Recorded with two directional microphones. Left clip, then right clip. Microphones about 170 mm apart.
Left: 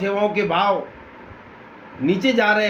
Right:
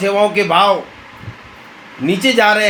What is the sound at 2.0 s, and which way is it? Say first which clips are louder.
Speech: right 6 dB; 45° right (ahead or behind).